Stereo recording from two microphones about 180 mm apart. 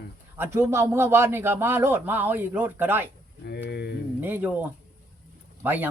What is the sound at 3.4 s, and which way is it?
Speech, 65° left (ahead or behind).